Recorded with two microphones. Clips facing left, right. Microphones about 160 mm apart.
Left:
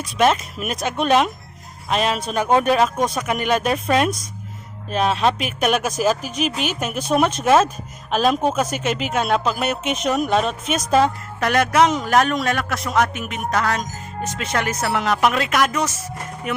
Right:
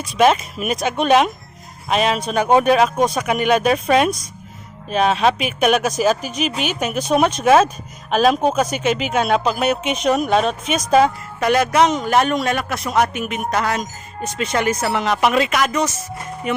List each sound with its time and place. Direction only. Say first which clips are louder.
0.2 s speech: right 3 dB; 5° right (ahead or behind)